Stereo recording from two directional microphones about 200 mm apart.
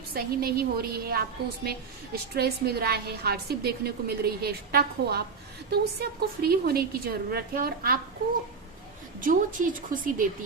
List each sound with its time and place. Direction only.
0.1 s a woman's voice: 50° right (ahead or behind)
2.3 s a woman's voice: 50° right (ahead or behind)
9.2 s a woman's voice: 40° right (ahead or behind)